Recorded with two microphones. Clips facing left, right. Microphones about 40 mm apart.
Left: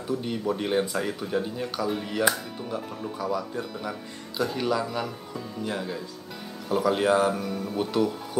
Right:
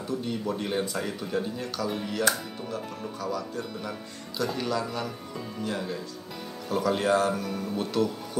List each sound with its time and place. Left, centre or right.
0.0 s speech: centre